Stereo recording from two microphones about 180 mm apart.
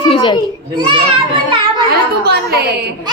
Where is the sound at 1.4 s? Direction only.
25° right (ahead or behind).